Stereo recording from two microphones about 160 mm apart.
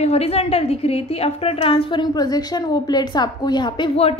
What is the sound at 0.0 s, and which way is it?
A woman's voice, 40° left (ahead or behind).